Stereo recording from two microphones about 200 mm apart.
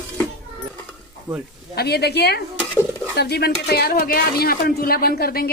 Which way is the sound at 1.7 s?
55° left (ahead or behind).